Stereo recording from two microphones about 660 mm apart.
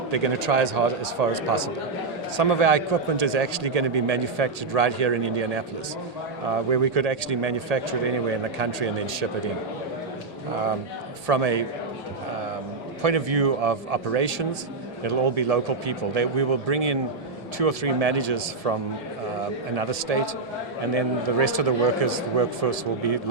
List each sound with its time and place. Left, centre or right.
0.1 s a man's voice: right
6.7 s a man's voice: right
11.3 s a man's voice: right
13.0 s a man's voice: right